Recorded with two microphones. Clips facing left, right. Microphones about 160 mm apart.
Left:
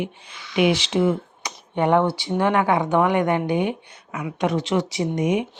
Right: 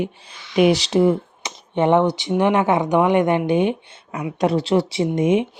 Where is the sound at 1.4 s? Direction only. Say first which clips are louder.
Right 3 dB; 25° right (ahead or behind).